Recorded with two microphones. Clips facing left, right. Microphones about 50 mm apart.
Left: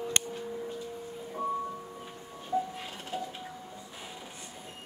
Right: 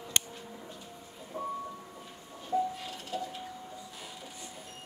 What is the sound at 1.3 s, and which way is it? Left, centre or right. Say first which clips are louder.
Music: left 3 dB; centre.